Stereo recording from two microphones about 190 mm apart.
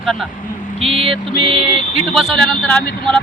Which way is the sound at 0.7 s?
30° right (ahead or behind).